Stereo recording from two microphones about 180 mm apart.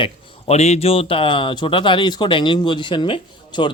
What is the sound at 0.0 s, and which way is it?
Speech, 35° left (ahead or behind).